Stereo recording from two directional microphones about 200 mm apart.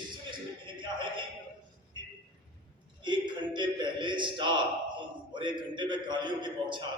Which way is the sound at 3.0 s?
20° right (ahead or behind).